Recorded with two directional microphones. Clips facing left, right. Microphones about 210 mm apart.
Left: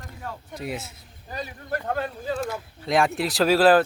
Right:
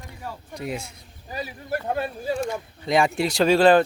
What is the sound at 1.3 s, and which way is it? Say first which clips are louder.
Speech: right 2 dB; 10° right (ahead or behind).